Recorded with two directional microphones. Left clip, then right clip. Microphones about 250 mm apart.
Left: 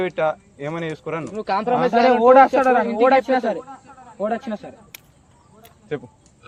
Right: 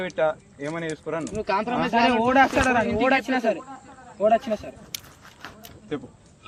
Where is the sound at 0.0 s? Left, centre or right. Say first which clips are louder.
Left 3 dB; left.